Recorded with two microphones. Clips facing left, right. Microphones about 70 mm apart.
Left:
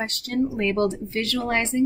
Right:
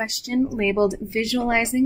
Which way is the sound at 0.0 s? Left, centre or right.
Centre.